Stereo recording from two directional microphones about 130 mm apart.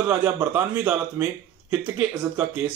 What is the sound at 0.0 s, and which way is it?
Speech, 15° right (ahead or behind).